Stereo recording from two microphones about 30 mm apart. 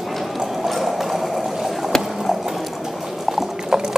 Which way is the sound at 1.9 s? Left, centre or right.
Centre.